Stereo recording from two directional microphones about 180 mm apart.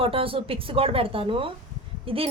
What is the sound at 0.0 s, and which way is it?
A woman's voice, 30° right (ahead or behind).